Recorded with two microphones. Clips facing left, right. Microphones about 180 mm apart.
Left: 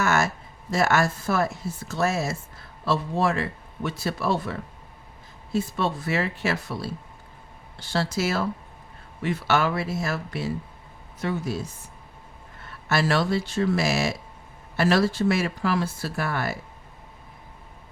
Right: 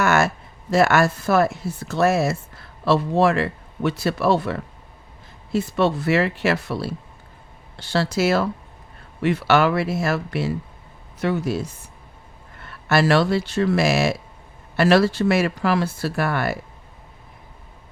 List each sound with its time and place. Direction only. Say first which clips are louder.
0.0 s a sound: right 4 dB; 65° right (ahead or behind)
0.7 s speech: right 5 dB; 65° right (ahead or behind)
12.9 s speech: right 5 dB; 70° right (ahead or behind)